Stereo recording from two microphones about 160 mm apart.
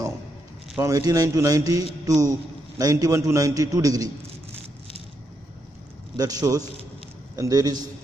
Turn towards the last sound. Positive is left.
turn(degrees=-25)  # may be behind; listen again after turning